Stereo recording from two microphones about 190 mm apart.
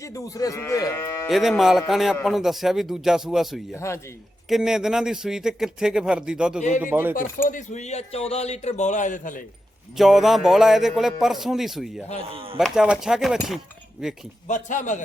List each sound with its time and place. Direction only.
0.0 s livestock: 15° left (ahead or behind)
1.3 s speech: centre (ahead or behind)
3.8 s livestock: 15° left (ahead or behind)
4.4 s speech: centre (ahead or behind)
7.4 s a man's voice: 40° left (ahead or behind)
10.0 s speech: centre (ahead or behind)
12.3 s speech: 30° right (ahead or behind)
12.5 s speech: centre (ahead or behind)
14.4 s a man's voice: 40° left (ahead or behind)